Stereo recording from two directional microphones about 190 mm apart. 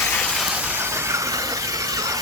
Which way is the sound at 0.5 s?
10° right (ahead or behind).